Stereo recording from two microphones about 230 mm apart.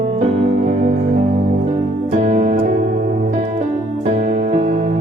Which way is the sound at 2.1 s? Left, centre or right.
Right.